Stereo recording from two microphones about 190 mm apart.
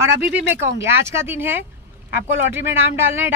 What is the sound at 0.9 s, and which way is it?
Speech, 15° right (ahead or behind).